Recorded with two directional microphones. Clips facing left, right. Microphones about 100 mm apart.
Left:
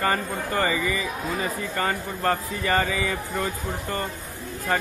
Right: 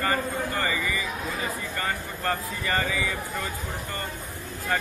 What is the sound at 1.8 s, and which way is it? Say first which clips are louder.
Speech: left 7 dB; 35° left (ahead or behind).